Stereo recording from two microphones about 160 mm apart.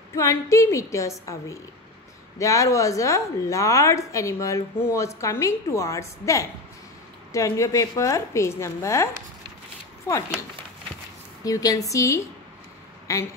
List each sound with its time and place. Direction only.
0.1 s a woman's voice: 20° left (ahead or behind)
11.4 s a woman's voice: 20° left (ahead or behind)